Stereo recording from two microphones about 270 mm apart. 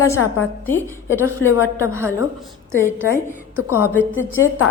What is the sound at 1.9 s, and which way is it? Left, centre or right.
Speech, centre.